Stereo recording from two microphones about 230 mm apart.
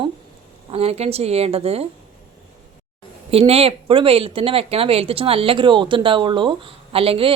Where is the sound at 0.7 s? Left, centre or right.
Right.